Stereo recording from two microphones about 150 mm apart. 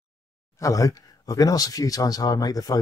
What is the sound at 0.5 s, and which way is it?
Speech, 20° left (ahead or behind).